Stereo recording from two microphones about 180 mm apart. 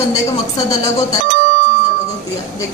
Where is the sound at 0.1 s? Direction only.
20° left (ahead or behind).